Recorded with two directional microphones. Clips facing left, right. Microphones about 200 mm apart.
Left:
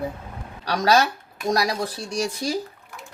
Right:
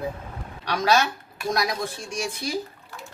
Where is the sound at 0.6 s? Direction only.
35° left (ahead or behind).